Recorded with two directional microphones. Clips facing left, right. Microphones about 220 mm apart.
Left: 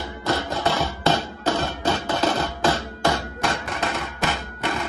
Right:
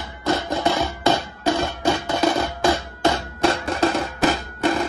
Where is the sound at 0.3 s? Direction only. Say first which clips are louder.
Right 3 dB; 15° right (ahead or behind).